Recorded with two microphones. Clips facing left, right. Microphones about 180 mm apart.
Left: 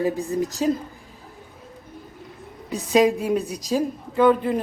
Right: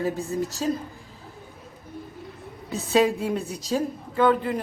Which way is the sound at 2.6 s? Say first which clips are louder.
Left 3 dB; 15° left (ahead or behind).